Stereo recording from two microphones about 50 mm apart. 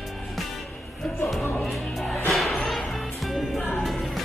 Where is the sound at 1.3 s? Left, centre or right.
Centre.